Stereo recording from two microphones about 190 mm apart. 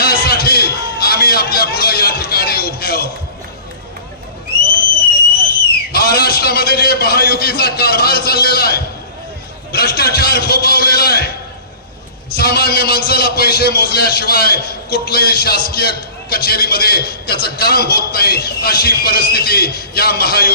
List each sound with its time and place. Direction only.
0.0 s a sound: 55° left (ahead or behind)
5.9 s a man's voice: 55° left (ahead or behind)
12.3 s a man's voice: 55° left (ahead or behind)